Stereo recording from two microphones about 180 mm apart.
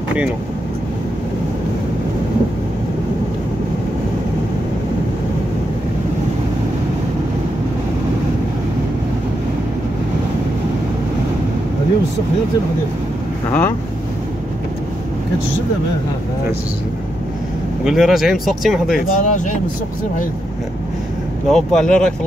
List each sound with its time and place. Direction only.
13.5 s speech: 10° left (ahead or behind)
17.8 s speech: centre (ahead or behind)
18.9 s speech: 45° left (ahead or behind)
21.5 s speech: centre (ahead or behind)